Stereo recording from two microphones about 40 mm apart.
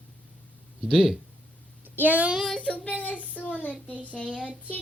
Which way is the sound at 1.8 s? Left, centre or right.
Right.